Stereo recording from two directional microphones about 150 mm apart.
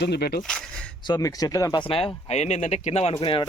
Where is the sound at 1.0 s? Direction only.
25° left (ahead or behind).